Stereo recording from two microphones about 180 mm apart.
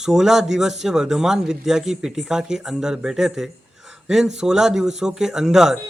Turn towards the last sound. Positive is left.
turn(degrees=-5)  # may be behind; listen again after turning